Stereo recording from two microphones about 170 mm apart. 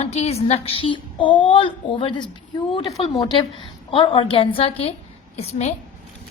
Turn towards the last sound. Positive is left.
turn(degrees=40)  # may be behind; listen again after turning